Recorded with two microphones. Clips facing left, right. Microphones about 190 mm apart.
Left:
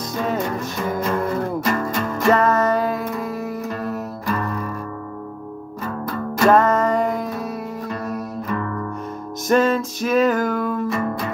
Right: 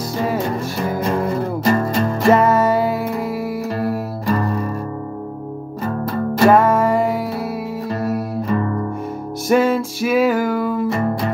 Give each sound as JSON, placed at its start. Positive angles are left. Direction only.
{"t": 1.6, "sound": "music", "side_deg": -35}
{"t": 2.2, "sound": "music", "side_deg": -15}
{"t": 4.3, "sound": "music", "side_deg": -30}
{"t": 6.4, "sound": "music", "side_deg": -10}
{"t": 8.5, "sound": "music", "side_deg": -25}
{"t": 9.5, "sound": "music", "side_deg": -10}